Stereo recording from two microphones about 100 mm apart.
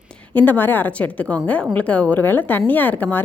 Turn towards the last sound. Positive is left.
turn(degrees=15)  # may be behind; listen again after turning